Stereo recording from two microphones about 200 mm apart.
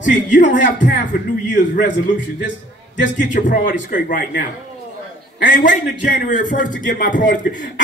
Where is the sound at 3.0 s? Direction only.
40° left (ahead or behind).